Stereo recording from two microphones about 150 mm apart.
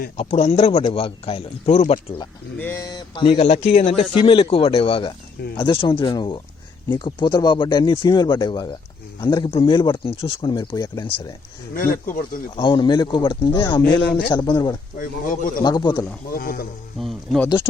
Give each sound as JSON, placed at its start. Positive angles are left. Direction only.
{"t": 0.2, "sound": "speech", "side_deg": 45}
{"t": 2.6, "sound": "speech", "side_deg": 15}
{"t": 3.4, "sound": "speech", "side_deg": 45}
{"t": 11.7, "sound": "speech", "side_deg": 65}
{"t": 12.5, "sound": "speech", "side_deg": 30}
{"t": 14.9, "sound": "speech", "side_deg": 65}
{"t": 15.6, "sound": "speech", "side_deg": 30}
{"t": 16.3, "sound": "speech", "side_deg": 85}
{"t": 17.0, "sound": "speech", "side_deg": 0}